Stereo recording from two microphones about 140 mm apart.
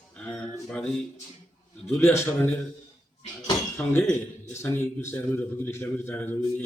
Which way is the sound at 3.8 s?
10° left (ahead or behind).